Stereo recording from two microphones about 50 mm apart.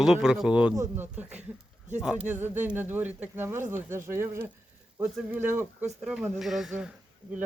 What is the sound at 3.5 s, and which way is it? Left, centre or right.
Speech, right.